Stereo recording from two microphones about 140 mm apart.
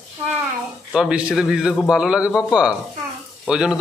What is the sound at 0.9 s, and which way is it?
A man's voice, 5° right (ahead or behind).